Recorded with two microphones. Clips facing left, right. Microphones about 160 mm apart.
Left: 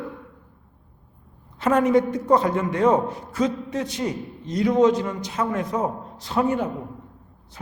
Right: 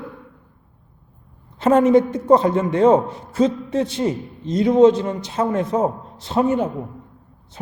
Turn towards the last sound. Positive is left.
turn(degrees=-20)  # may be behind; listen again after turning